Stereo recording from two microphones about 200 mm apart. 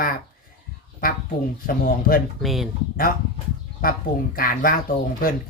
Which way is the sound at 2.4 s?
Centre (ahead or behind).